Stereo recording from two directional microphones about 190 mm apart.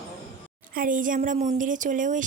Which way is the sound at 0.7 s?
45° right (ahead or behind).